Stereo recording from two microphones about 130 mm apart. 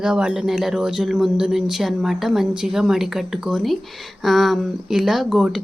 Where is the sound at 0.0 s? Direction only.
5° right (ahead or behind).